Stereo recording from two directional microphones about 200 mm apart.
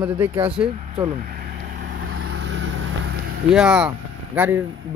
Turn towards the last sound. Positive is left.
turn(degrees=-10)  # may be behind; listen again after turning